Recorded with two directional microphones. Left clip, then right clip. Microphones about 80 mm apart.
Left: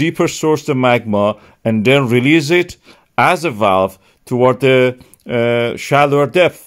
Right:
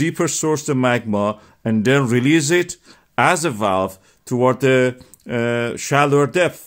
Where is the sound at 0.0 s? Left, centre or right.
Left.